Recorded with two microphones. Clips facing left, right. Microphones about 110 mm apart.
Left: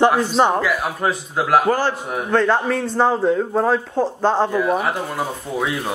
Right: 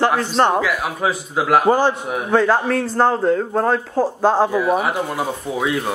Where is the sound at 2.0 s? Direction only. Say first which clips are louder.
Right 1 dB; 5° right (ahead or behind).